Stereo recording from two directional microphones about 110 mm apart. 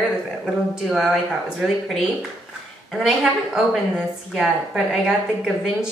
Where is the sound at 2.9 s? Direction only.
Centre (ahead or behind).